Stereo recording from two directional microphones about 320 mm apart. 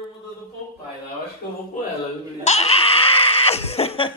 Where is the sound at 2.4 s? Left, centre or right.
Centre.